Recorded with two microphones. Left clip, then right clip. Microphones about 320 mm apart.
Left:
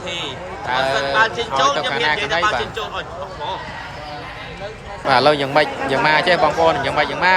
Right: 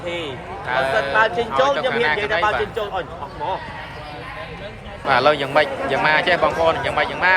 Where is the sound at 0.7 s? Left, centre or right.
Centre.